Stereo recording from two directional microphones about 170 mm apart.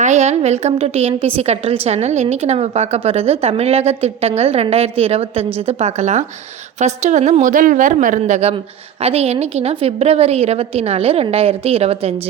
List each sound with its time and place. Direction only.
0.0 s a woman's voice: 40° right (ahead or behind)